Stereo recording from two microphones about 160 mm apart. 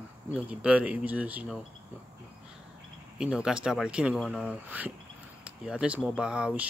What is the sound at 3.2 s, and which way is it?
Speech, 5° right (ahead or behind).